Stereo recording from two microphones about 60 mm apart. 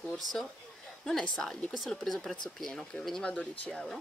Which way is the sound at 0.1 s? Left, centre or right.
Centre.